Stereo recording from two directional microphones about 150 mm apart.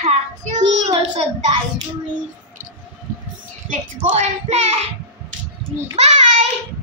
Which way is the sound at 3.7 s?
45° right (ahead or behind).